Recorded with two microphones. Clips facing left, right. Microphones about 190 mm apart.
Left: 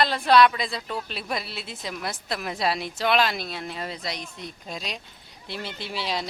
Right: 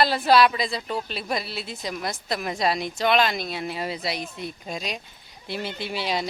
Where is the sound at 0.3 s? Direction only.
5° right (ahead or behind).